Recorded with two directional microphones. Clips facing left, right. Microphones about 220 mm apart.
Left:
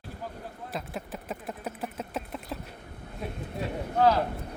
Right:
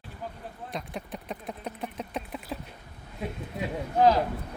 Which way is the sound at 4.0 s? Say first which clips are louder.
Right 2 dB; 15° right (ahead or behind).